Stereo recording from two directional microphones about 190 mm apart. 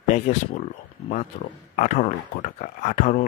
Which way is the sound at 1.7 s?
40° left (ahead or behind).